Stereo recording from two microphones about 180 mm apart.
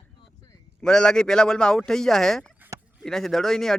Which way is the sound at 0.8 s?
5° left (ahead or behind).